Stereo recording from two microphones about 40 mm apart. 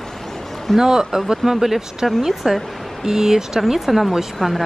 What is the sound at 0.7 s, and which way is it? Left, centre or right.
A woman's voice, centre.